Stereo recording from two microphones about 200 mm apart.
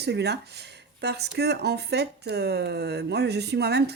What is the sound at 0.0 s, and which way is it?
Speech, 55° right (ahead or behind).